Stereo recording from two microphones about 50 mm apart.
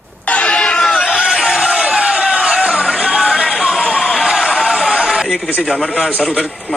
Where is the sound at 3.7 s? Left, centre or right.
Centre.